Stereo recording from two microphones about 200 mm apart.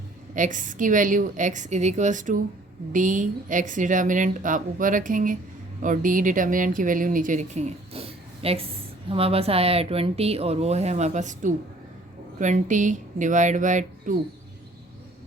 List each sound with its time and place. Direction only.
0.3 s speech: 40° right (ahead or behind)